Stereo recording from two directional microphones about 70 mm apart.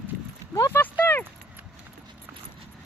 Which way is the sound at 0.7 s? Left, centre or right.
Left.